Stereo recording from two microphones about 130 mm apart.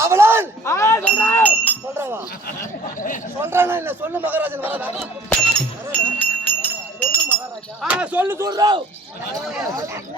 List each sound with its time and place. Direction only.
0.0 s a sound: 20° right (ahead or behind)
0.6 s speech: 20° left (ahead or behind)
1.0 s a sound: 15° left (ahead or behind)
2.0 s speech: 15° right (ahead or behind)
3.4 s a man's voice: 20° right (ahead or behind)
5.5 s speech: 10° left (ahead or behind)
7.1 s chink: 15° right (ahead or behind)
7.8 s a man's voice: 10° right (ahead or behind)
8.4 s a man's voice: 30° right (ahead or behind)